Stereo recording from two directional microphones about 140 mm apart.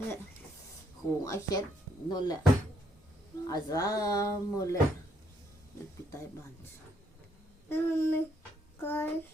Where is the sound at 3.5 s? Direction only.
25° left (ahead or behind).